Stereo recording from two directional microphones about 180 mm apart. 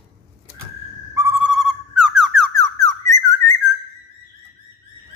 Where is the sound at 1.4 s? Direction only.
5° right (ahead or behind).